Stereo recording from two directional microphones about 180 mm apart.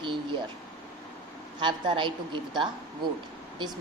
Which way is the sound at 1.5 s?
25° right (ahead or behind).